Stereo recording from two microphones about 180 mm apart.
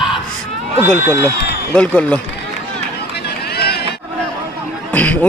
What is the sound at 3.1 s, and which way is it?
Run, 65° left (ahead or behind).